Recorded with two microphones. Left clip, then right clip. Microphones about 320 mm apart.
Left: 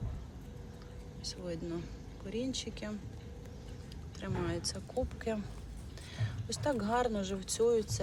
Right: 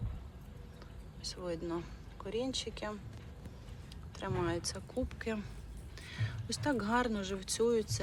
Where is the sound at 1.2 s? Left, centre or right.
Centre.